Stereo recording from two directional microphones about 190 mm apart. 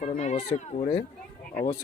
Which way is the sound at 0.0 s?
35° left (ahead or behind).